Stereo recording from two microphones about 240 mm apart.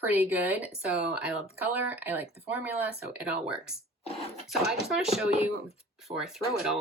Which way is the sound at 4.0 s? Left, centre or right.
Left.